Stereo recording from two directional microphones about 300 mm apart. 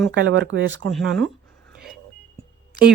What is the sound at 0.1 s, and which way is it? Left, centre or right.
Speech, right.